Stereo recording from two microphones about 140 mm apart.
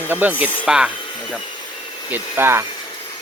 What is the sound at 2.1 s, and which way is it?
Speech, 15° right (ahead or behind).